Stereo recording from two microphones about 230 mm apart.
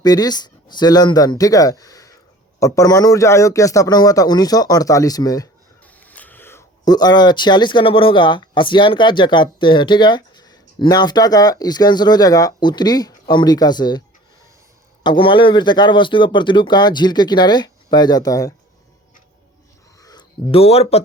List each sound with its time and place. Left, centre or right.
0.0 s a man's voice: centre
15.0 s speech: left
20.0 s speech: centre